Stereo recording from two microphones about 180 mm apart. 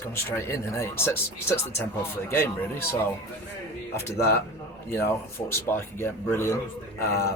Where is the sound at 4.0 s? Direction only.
15° left (ahead or behind).